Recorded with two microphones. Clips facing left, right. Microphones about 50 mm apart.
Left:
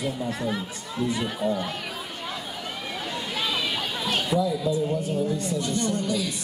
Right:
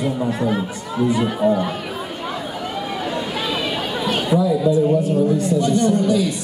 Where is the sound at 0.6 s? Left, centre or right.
Right.